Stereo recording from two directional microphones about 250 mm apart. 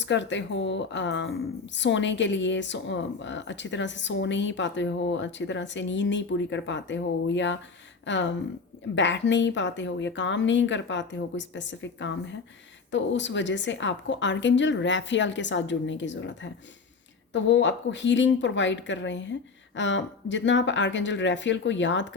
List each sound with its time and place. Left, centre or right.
0.0 s speech: left